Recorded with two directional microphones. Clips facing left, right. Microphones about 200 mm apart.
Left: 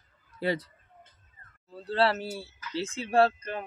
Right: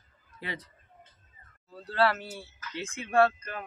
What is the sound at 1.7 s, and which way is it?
Speech, 30° left (ahead or behind).